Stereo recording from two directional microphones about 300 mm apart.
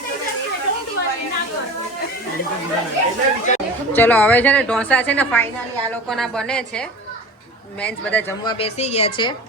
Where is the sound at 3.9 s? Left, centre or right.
Centre.